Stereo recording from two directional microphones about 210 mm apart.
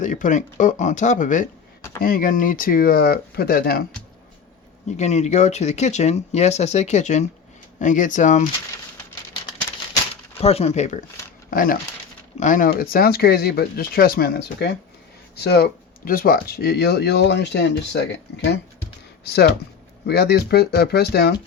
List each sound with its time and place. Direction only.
0.0 s speech: 35° left (ahead or behind)
4.9 s speech: 35° left (ahead or behind)
9.0 s a sound: 10° left (ahead or behind)
10.3 s speech: 30° left (ahead or behind); by 21.3 s 50° left (ahead or behind)